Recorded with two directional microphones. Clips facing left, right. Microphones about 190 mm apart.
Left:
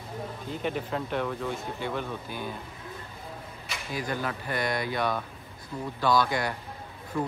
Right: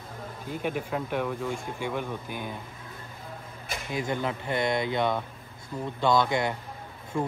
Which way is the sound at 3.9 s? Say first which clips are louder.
Right 2 dB; 20° right (ahead or behind).